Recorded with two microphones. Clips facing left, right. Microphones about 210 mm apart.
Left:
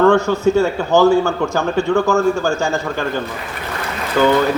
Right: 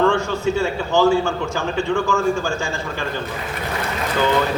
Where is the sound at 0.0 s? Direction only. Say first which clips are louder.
Left 6 dB; 40° left (ahead or behind).